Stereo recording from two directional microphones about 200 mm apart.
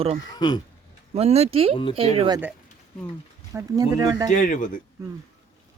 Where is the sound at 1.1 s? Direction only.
30° right (ahead or behind).